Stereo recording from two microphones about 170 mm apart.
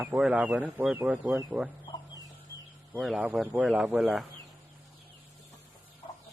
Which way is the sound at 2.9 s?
5° right (ahead or behind).